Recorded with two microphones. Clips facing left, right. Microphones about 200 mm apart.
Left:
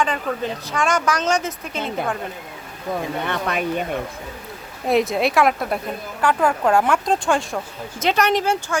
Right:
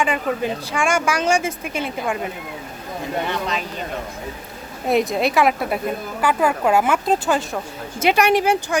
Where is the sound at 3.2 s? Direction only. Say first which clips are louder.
Left 2 dB; 60° left (ahead or behind).